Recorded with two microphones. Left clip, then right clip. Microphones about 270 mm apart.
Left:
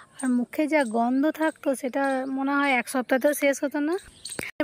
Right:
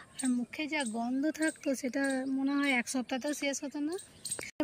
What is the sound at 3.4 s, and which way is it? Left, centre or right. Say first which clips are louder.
Speech: left 12 dB; left.